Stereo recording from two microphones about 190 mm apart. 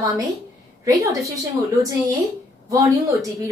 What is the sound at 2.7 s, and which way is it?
Speech, 15° right (ahead or behind).